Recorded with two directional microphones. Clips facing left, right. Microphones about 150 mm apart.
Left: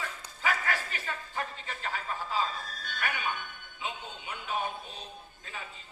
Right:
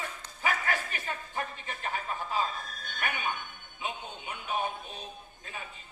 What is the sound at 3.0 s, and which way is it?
Music, 15° right (ahead or behind).